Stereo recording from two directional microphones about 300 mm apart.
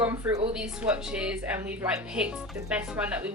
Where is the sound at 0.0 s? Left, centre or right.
Centre.